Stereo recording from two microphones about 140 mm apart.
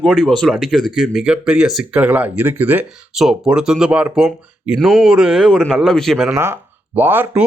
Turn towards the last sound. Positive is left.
turn(degrees=-15)  # may be behind; listen again after turning